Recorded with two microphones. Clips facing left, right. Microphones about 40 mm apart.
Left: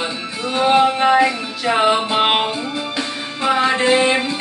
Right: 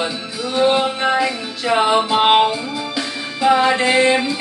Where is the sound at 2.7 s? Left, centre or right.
Left.